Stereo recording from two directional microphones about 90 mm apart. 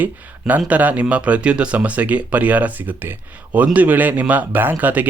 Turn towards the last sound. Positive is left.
turn(degrees=-20)  # may be behind; listen again after turning